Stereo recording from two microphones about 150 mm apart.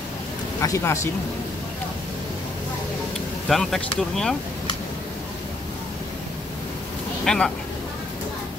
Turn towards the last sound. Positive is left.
turn(degrees=5)  # may be behind; listen again after turning